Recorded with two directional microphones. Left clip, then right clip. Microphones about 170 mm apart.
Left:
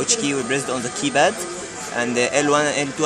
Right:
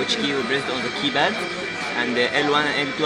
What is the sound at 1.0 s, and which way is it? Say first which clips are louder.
A man's voice: left 4 dB; 80° left.